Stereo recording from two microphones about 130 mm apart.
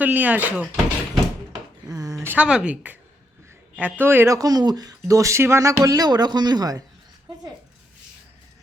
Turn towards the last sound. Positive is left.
turn(degrees=-30)  # may be behind; listen again after turning